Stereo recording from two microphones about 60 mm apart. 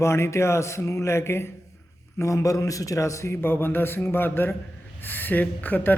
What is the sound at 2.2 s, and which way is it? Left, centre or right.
A man's voice, left.